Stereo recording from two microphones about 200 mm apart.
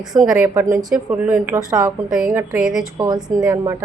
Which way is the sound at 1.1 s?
10° right (ahead or behind).